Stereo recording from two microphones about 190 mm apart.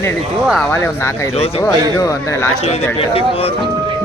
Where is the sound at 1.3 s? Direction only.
30° left (ahead or behind).